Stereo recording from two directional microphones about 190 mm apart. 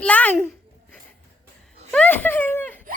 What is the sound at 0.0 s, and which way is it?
Speech, 10° left (ahead or behind).